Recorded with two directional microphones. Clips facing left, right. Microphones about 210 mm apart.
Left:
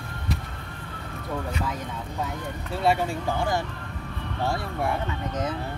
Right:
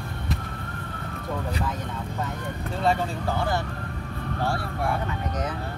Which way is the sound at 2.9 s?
15° left (ahead or behind).